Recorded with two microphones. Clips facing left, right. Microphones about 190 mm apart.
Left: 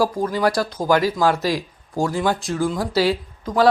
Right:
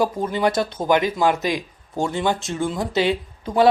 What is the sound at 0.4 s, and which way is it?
Speech, 25° right (ahead or behind).